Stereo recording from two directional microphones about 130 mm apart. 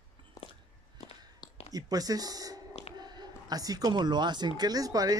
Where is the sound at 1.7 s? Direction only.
30° right (ahead or behind).